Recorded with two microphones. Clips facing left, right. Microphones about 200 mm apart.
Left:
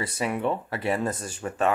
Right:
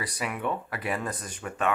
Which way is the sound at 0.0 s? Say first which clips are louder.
Left 5 dB; 30° left (ahead or behind).